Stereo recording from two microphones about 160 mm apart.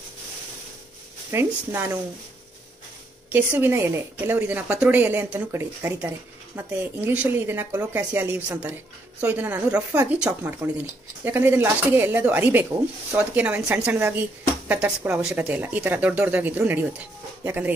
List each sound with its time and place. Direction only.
1.3 s a woman's voice: 15° right (ahead or behind)
3.3 s a woman's voice: 10° right (ahead or behind)